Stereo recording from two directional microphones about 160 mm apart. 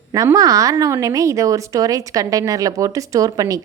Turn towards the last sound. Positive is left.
turn(degrees=-20)  # may be behind; listen again after turning